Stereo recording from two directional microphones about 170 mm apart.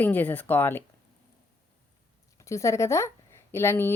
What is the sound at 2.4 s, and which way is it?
Speech, 15° left (ahead or behind).